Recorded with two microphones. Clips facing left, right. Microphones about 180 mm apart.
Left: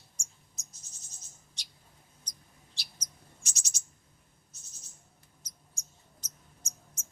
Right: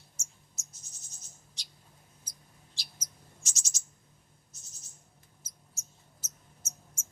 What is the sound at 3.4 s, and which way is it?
Owl, 60° left (ahead or behind).